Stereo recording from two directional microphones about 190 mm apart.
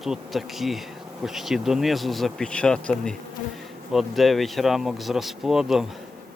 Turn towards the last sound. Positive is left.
turn(degrees=0)  # may be behind; listen again after turning